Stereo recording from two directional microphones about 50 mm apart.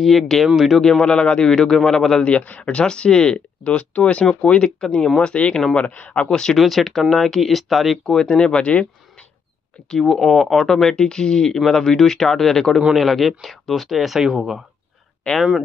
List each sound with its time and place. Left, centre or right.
0.0 s speech: centre
0.7 s speech: centre
1.0 s speech: centre
2.2 s speech: left
4.8 s speech: centre
6.5 s speech: centre
8.2 s speech: centre
9.8 s speech: centre